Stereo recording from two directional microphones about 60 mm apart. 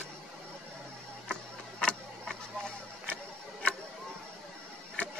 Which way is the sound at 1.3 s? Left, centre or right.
Centre.